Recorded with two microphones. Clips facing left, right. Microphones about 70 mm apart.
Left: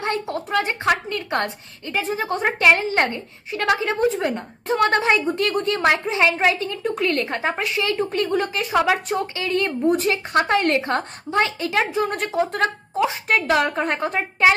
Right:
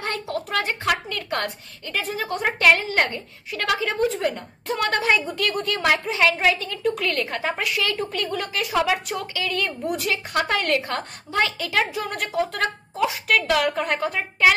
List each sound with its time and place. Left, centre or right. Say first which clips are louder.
0.0 s a woman's voice: left 3 dB; left